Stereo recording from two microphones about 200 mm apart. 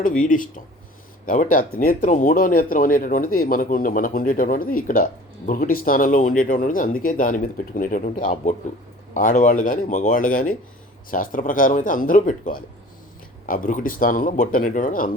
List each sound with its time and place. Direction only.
0.3 s speech: 40° left (ahead or behind)